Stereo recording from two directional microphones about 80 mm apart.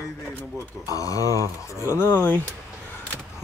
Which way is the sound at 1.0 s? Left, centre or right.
Left.